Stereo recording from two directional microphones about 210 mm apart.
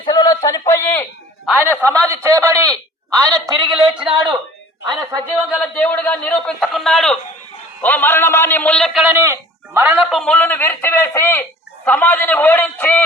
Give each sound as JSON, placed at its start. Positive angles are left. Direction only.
{"t": 0.0, "sound": "a man's voice", "side_deg": 20}
{"t": 1.5, "sound": "a man's voice", "side_deg": -5}
{"t": 3.4, "sound": "a man's voice", "side_deg": 0}
{"t": 5.5, "sound": "a man's voice", "side_deg": 5}
{"t": 9.1, "sound": "a man's voice", "side_deg": -15}